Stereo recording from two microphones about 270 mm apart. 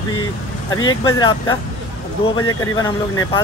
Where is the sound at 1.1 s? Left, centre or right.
Centre.